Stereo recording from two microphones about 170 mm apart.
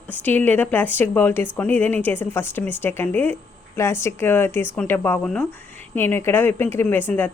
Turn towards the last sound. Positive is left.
turn(degrees=10)  # may be behind; listen again after turning